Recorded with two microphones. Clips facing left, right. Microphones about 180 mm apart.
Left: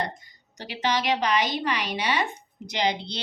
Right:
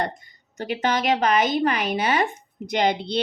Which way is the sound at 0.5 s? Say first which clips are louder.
Right 3 dB; 50° right (ahead or behind).